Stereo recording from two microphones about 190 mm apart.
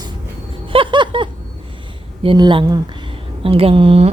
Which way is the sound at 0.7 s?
25° right (ahead or behind).